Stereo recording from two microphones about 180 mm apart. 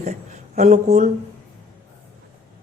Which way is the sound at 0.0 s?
40° right (ahead or behind).